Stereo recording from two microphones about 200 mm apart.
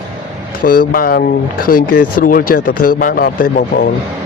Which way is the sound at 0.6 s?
45° left (ahead or behind).